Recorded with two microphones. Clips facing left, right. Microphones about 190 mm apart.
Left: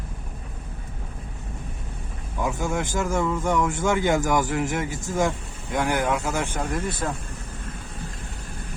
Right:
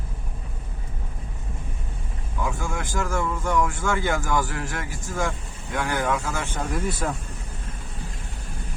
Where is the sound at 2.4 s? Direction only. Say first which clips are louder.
Left 4 dB; 20° left (ahead or behind).